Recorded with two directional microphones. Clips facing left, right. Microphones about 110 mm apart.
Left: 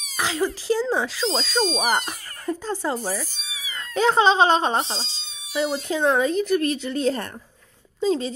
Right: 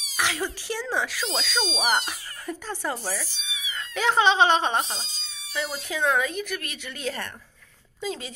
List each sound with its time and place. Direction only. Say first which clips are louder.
0.2 s speech: left 4 dB; 30° left (ahead or behind)
2.6 s speech: left 4 dB; 20° left (ahead or behind)
3.0 s speech: left 4 dB; 45° left (ahead or behind)